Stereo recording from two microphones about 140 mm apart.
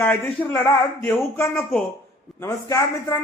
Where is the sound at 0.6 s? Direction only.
15° left (ahead or behind).